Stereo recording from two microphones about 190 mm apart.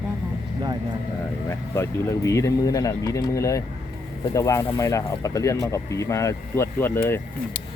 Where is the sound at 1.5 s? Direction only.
15° left (ahead or behind).